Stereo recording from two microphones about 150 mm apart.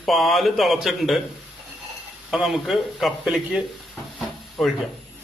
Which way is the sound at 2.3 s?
Centre (ahead or behind).